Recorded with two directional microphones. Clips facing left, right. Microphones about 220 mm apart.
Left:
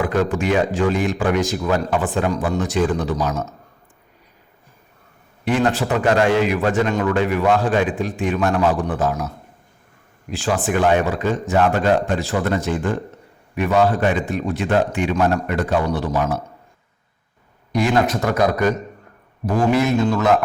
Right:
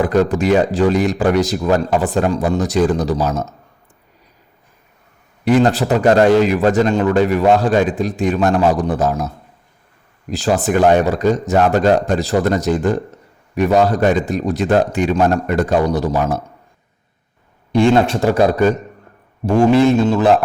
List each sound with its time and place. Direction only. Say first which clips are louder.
0.0 s a man's voice: right 5 dB; 35° right (ahead or behind)
5.5 s a man's voice: right 5 dB; 35° right (ahead or behind)
17.7 s a man's voice: right 5 dB; 30° right (ahead or behind)